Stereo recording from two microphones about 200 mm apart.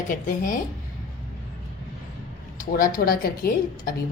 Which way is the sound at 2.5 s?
45° left (ahead or behind).